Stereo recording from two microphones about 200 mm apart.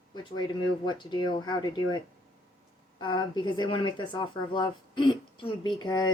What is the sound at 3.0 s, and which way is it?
Speech, 20° left (ahead or behind).